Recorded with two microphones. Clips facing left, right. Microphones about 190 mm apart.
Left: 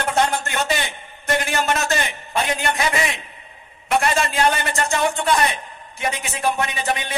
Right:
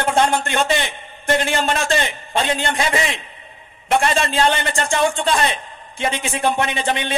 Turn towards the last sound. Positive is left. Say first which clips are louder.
# right 3 dB
turn(degrees=-25)  # may be behind; listen again after turning